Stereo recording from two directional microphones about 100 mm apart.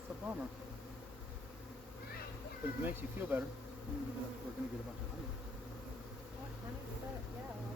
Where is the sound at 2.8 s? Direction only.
15° right (ahead or behind).